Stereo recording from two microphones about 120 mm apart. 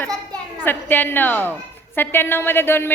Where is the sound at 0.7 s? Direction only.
15° left (ahead or behind).